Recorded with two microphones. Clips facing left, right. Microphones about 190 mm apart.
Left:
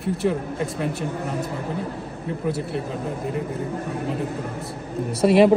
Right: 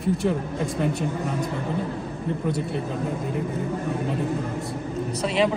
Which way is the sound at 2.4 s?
5° left (ahead or behind).